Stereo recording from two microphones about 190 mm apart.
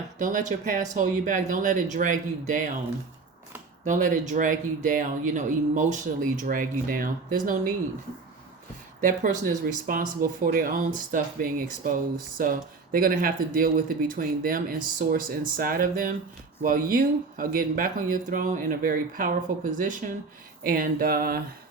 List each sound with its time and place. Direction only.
0.2 s speech: 40° right (ahead or behind)
3.8 s speech: 45° right (ahead or behind)
9.0 s speech: 45° right (ahead or behind)